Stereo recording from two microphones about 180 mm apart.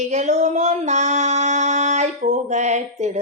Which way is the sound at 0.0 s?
40° right (ahead or behind).